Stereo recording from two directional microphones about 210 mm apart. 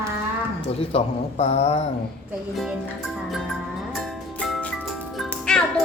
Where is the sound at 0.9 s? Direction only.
30° left (ahead or behind).